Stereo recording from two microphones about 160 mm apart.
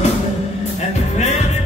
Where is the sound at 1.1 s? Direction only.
45° left (ahead or behind).